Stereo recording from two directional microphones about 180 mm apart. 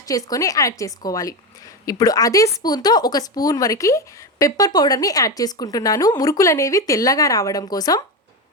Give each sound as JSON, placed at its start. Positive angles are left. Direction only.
{"t": 0.1, "sound": "speech", "side_deg": 20}